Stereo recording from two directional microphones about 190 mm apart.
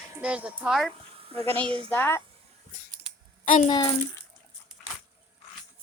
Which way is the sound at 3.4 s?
45° left (ahead or behind).